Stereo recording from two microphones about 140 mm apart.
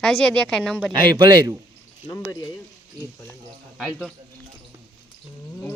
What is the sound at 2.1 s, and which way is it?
Speech, 25° left (ahead or behind).